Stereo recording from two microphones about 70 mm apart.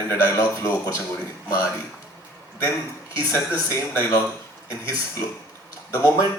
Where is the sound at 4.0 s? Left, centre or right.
Left.